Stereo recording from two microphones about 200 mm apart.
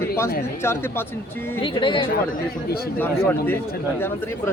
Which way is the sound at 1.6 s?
25° left (ahead or behind).